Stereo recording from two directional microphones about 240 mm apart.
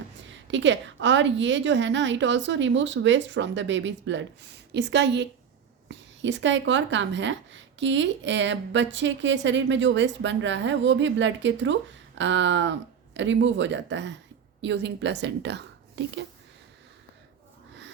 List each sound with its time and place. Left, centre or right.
0.4 s a woman's voice: right